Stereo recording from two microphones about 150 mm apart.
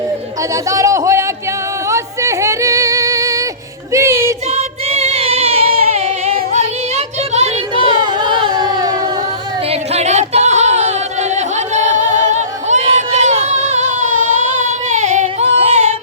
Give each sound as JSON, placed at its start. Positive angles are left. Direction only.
{"t": 0.7, "sound": "speech", "side_deg": -20}
{"t": 1.9, "sound": "a sound", "side_deg": -20}
{"t": 3.9, "sound": "music", "side_deg": -15}
{"t": 4.9, "sound": "music", "side_deg": -45}
{"t": 7.9, "sound": "music", "side_deg": -30}
{"t": 9.9, "sound": "music", "side_deg": -50}
{"t": 14.6, "sound": "singing", "side_deg": -55}